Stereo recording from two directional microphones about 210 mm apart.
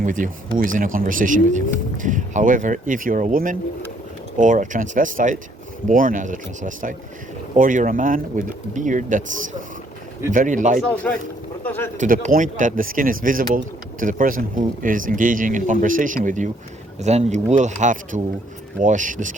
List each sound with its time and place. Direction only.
0.0 s speech: 40° right (ahead or behind)
10.8 s speech: 5° left (ahead or behind)
11.9 s speech: 40° right (ahead or behind)